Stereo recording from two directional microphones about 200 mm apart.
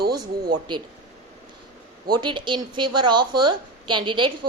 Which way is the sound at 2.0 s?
25° right (ahead or behind).